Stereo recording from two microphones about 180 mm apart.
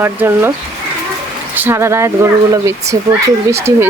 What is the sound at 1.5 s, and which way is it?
Speech, 10° right (ahead or behind).